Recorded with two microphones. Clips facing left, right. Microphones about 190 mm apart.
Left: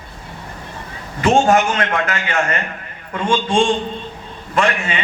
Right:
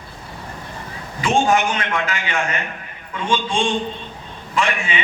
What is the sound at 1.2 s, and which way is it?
A man's voice, 55° left (ahead or behind).